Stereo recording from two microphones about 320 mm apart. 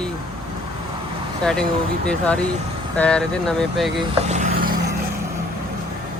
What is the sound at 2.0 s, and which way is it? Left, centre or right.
Speech, centre.